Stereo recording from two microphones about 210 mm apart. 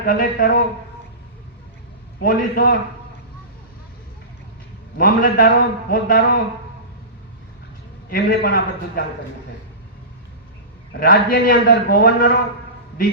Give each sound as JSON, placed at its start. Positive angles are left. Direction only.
{"t": 0.0, "sound": "a man's voice", "side_deg": 45}
{"t": 2.2, "sound": "a man's voice", "side_deg": 45}
{"t": 4.9, "sound": "a man's voice", "side_deg": 45}
{"t": 8.1, "sound": "a man's voice", "side_deg": 50}
{"t": 11.0, "sound": "a man's voice", "side_deg": 45}